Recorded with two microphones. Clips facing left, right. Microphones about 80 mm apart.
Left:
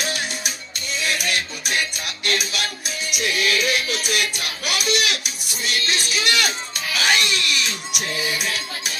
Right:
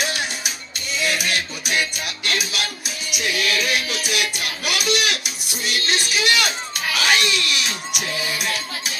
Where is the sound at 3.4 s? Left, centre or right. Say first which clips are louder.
Left 1 dB; right.